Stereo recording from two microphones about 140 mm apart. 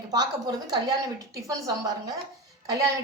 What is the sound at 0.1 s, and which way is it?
A woman's voice, 30° right (ahead or behind).